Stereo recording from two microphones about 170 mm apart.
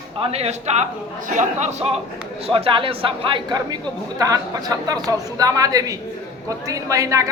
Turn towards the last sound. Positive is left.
turn(degrees=-20)  # may be behind; listen again after turning